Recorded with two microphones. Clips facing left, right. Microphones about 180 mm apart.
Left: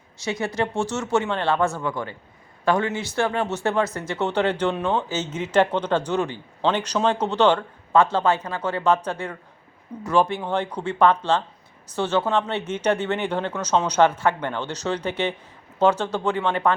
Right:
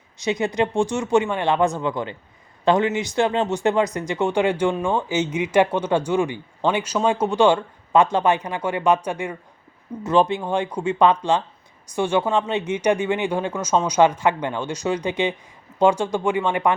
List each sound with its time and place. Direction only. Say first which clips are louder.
0.2 s speech: right 4 dB; 20° right (ahead or behind)